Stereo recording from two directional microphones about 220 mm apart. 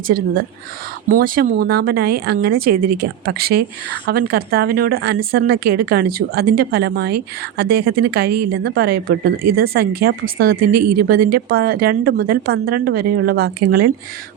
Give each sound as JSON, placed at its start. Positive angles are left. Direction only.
{"t": 1.1, "sound": "a woman's voice", "side_deg": -40}